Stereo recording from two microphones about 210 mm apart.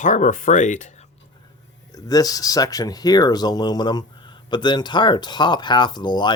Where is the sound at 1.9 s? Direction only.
15° left (ahead or behind).